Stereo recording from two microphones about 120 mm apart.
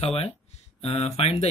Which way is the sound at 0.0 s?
55° left (ahead or behind).